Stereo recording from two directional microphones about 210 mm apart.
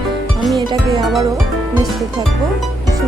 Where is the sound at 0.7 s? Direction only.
20° right (ahead or behind).